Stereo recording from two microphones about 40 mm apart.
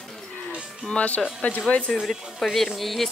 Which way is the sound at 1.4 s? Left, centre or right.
Left.